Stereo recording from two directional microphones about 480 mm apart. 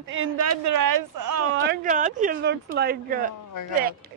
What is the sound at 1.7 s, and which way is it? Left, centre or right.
Speech, centre.